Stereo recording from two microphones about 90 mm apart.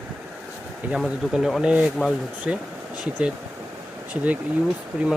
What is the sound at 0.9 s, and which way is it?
Speech, 5° right (ahead or behind).